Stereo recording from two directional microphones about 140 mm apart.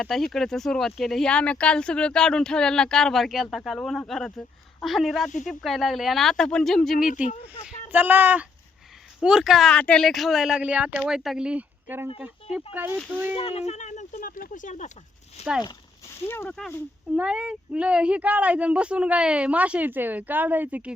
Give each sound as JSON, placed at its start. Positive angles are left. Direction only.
{"t": 0.0, "sound": "speech", "side_deg": 0}
{"t": 7.9, "sound": "speech", "side_deg": -15}
{"t": 13.3, "sound": "speech", "side_deg": 45}
{"t": 15.4, "sound": "speech", "side_deg": 50}
{"t": 16.3, "sound": "speech", "side_deg": 15}
{"t": 17.2, "sound": "speech", "side_deg": -10}